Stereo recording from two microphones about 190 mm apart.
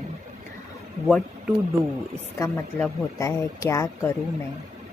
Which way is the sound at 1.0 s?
Centre (ahead or behind).